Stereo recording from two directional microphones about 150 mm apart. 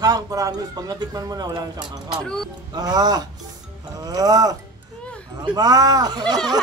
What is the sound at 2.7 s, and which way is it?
Speech, 25° right (ahead or behind).